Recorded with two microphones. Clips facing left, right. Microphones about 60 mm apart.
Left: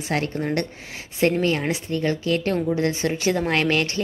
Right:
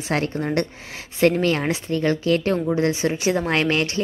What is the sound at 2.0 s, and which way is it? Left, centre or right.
Speech, right.